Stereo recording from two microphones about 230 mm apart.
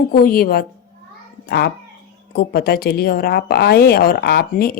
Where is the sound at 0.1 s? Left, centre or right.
Left.